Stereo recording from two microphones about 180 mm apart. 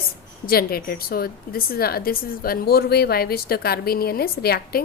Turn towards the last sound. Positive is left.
turn(degrees=60)  # may be behind; listen again after turning